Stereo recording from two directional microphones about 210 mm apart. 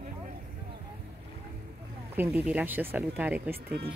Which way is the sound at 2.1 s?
10° right (ahead or behind).